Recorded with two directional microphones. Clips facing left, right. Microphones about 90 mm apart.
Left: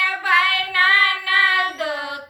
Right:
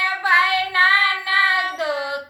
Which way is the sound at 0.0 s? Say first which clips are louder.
Right 1 dB; 20° right (ahead or behind).